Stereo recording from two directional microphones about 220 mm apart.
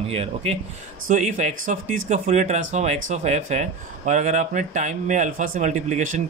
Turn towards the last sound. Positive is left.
turn(degrees=-35)  # may be behind; listen again after turning